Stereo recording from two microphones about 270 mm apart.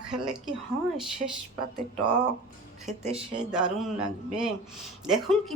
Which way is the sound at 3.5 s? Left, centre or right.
Centre.